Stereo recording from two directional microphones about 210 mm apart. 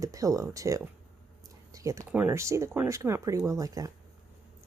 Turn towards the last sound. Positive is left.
turn(degrees=-15)  # may be behind; listen again after turning